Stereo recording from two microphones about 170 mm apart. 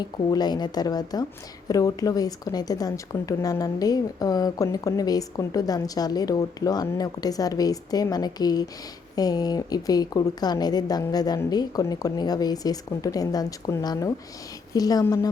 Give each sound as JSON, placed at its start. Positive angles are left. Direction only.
{"t": 0.0, "sound": "a woman's voice", "side_deg": 25}